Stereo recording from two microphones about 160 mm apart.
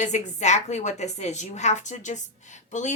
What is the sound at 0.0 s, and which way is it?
A woman's voice, 50° left (ahead or behind).